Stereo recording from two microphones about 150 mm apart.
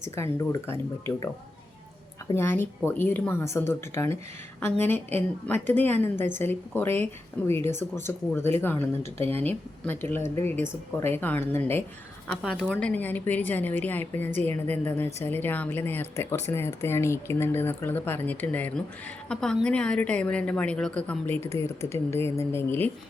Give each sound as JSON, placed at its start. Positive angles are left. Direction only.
{"t": 0.0, "sound": "a woman's voice", "side_deg": 20}
{"t": 2.3, "sound": "a woman's voice", "side_deg": 15}
{"t": 12.4, "sound": "a woman's voice", "side_deg": -5}
{"t": 12.7, "sound": "a woman's voice", "side_deg": 10}